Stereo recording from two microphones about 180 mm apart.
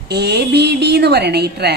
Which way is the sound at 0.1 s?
65° right (ahead or behind).